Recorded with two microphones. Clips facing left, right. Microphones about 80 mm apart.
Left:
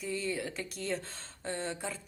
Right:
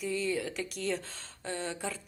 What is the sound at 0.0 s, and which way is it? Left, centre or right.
A woman's voice, left.